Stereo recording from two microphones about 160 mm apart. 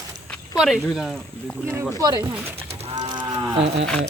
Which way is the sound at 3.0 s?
25° right (ahead or behind).